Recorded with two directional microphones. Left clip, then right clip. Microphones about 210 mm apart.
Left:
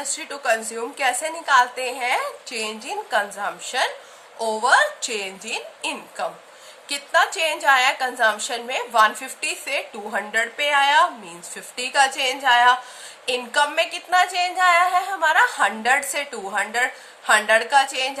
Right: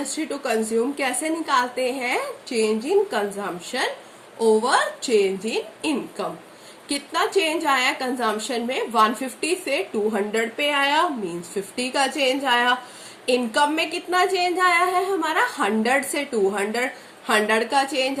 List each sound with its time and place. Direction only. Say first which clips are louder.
0.1 s a woman's voice: left 4 dB; 50° left (ahead or behind)